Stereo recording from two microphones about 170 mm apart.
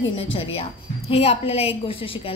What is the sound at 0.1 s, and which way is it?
A woman's voice, 35° left (ahead or behind).